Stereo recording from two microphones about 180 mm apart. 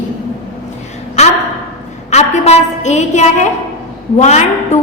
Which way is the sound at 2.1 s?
40° left (ahead or behind).